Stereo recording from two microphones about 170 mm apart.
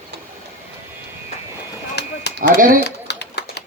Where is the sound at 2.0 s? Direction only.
80° left.